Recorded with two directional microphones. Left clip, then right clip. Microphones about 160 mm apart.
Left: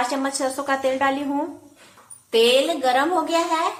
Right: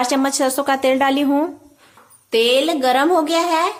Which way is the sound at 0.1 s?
90° right.